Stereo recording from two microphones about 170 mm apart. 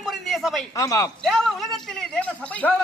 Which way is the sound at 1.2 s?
5° left (ahead or behind).